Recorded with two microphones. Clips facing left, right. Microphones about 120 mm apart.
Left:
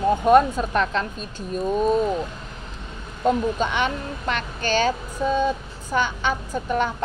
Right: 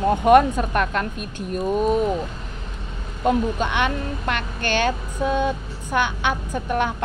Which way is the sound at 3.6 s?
55° right (ahead or behind).